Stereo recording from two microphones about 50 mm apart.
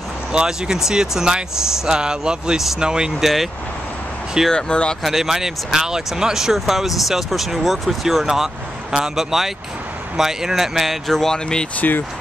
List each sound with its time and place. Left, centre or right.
0.3 s speech: centre
4.5 s speech: centre
5.0 s speech: centre
11.8 s speech: left